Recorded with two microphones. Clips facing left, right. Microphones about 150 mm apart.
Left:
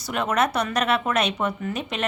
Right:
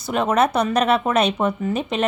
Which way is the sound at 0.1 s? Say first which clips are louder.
Right 5 dB; 30° right (ahead or behind).